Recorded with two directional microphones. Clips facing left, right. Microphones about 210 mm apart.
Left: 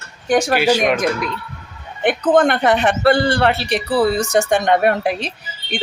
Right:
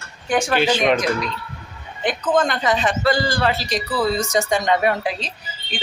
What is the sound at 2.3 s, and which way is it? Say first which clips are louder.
Speech: left 5 dB; 60° left (ahead or behind).